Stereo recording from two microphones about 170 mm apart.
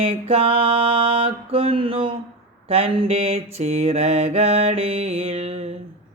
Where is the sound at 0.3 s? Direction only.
35° right (ahead or behind).